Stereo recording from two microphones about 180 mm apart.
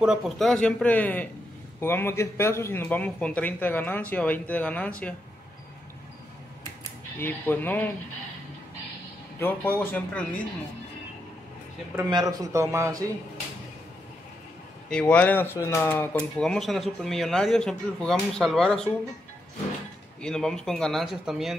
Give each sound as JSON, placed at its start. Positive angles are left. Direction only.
{"t": 0.0, "sound": "speech", "side_deg": 0}
{"t": 7.2, "sound": "speech", "side_deg": 10}
{"t": 9.4, "sound": "speech", "side_deg": 10}
{"t": 12.1, "sound": "a man's voice", "side_deg": -20}
{"t": 14.9, "sound": "speech", "side_deg": 5}
{"t": 20.2, "sound": "speech", "side_deg": 5}